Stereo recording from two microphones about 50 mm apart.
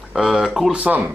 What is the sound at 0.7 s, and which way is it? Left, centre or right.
Speech, right.